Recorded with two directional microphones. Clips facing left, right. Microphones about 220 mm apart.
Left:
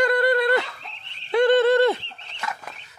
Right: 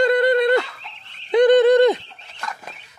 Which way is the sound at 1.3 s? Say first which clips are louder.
Right 4 dB; 15° right (ahead or behind).